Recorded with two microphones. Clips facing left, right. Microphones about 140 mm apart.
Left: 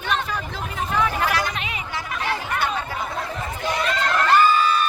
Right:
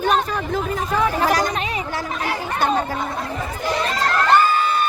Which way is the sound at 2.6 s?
40° right (ahead or behind).